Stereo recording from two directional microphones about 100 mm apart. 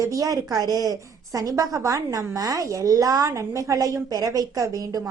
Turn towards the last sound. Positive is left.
turn(degrees=-35)  # may be behind; listen again after turning